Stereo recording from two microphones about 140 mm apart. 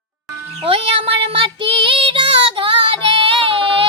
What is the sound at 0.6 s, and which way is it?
Child singing, 40° right (ahead or behind).